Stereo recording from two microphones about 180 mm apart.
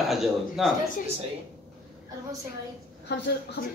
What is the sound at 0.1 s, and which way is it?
Speech, centre (ahead or behind).